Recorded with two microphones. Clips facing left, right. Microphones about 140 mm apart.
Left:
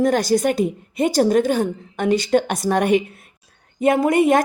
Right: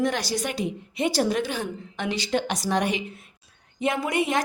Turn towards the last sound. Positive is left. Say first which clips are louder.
# left 9 dB
turn(degrees=50)  # may be behind; listen again after turning